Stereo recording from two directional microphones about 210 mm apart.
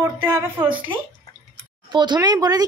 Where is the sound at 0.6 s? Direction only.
25° right (ahead or behind).